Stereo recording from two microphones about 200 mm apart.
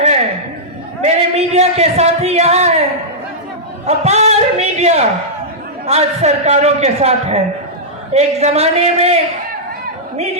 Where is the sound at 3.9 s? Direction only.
35° right (ahead or behind).